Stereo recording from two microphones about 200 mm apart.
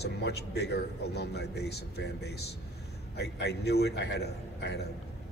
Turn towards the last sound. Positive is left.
turn(degrees=55)  # may be behind; listen again after turning